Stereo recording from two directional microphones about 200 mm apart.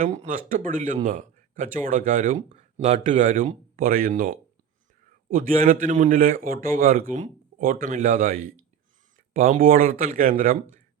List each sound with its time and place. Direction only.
0.0 s a man's voice: 40° right (ahead or behind)